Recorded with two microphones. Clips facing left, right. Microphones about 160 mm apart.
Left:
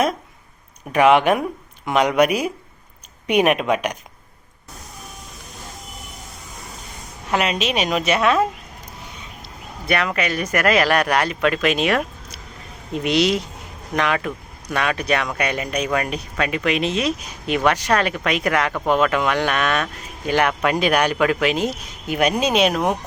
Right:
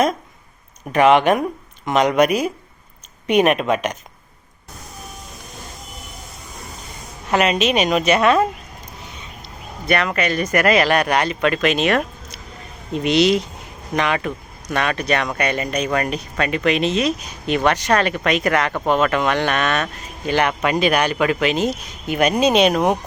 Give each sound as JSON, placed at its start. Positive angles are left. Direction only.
{"t": 0.9, "sound": "speech", "side_deg": 5}
{"t": 7.3, "sound": "speech", "side_deg": 0}
{"t": 20.5, "sound": "speech", "side_deg": -5}